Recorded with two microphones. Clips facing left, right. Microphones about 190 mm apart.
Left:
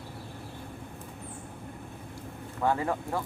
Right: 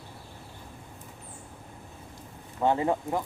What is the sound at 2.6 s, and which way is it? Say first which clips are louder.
Speech: right 3 dB; 20° right (ahead or behind).